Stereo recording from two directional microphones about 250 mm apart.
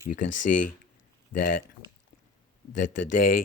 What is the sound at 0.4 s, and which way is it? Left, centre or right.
Speech, left.